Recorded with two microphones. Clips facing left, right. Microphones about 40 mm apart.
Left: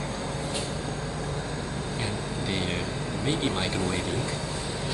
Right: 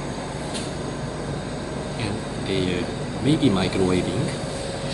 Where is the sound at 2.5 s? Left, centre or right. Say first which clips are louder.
Right 7 dB; centre.